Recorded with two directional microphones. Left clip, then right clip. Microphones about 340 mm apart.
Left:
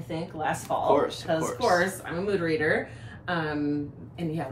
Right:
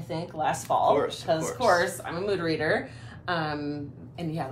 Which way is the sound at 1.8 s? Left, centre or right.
Centre.